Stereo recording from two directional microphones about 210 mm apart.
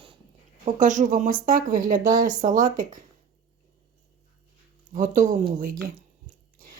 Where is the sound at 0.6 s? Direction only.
35° right (ahead or behind).